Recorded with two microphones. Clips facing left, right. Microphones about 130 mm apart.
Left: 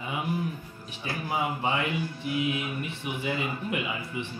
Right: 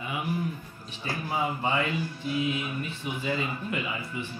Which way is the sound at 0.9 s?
15° left (ahead or behind).